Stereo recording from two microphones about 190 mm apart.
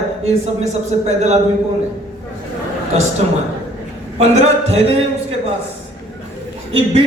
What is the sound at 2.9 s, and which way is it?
Speech, 35° right (ahead or behind).